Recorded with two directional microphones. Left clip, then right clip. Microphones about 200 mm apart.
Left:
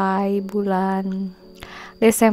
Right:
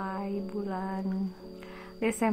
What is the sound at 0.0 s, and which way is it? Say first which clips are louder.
A woman's voice: left 14 dB; 40° left (ahead or behind).